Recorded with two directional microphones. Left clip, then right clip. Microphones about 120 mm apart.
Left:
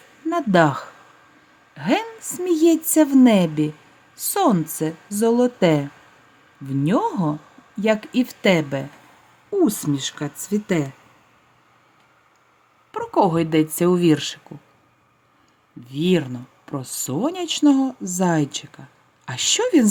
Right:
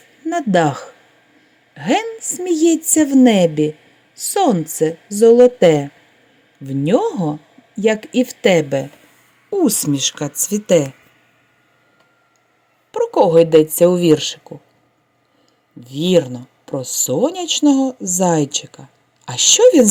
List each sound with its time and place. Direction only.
0.3 s speech: centre (ahead or behind)
9.6 s speech: 25° right (ahead or behind)
12.9 s speech: 5° left (ahead or behind)
15.8 s speech: 5° left (ahead or behind)